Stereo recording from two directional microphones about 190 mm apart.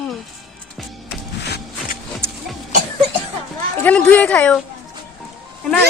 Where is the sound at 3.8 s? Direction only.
5° left (ahead or behind).